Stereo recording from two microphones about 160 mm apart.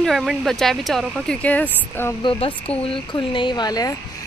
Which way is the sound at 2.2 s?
35° left (ahead or behind).